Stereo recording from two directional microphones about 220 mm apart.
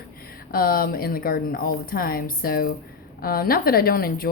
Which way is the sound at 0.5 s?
40° left (ahead or behind).